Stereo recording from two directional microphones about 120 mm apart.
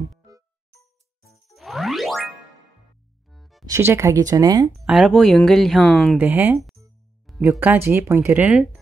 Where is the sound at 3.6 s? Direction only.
20° right (ahead or behind).